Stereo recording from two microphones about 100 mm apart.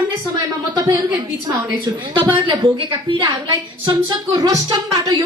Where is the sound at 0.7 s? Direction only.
40° right (ahead or behind).